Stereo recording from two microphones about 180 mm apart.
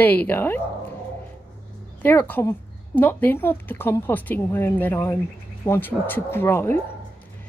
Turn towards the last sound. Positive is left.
turn(degrees=15)  # may be behind; listen again after turning